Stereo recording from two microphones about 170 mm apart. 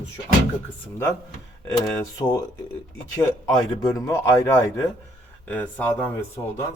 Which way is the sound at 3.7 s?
20° left (ahead or behind).